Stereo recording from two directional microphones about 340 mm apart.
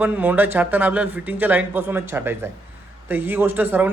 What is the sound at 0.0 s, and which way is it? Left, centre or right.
A man's voice, centre.